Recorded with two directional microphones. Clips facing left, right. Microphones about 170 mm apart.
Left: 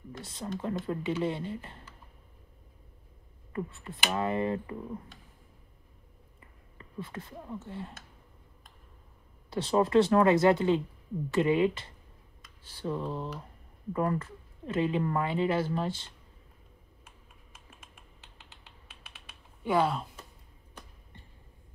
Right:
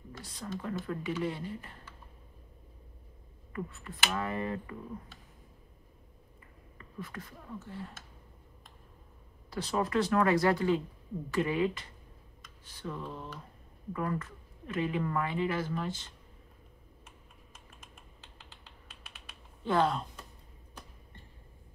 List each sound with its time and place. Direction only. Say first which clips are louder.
0.2 s speech: left 3 dB; 25° left (ahead or behind)
3.5 s speech: left 3 dB; 25° left (ahead or behind)
6.8 s speech: left 3 dB; 25° left (ahead or behind)
9.5 s speech: left 6 dB; 25° left (ahead or behind)
18.2 s typing: right 1 dB; 5° left (ahead or behind)